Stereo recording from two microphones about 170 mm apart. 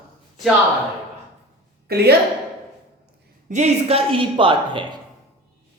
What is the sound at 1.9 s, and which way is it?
Speech, 70° right (ahead or behind).